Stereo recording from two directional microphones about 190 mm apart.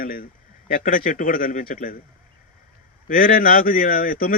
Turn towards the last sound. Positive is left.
turn(degrees=50)  # may be behind; listen again after turning